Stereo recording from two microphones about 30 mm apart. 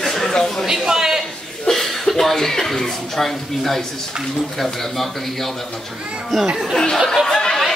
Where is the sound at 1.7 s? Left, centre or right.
Centre.